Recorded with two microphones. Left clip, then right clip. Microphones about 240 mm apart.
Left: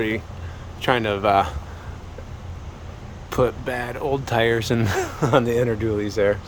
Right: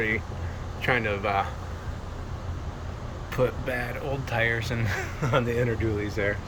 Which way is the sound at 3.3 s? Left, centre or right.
Left.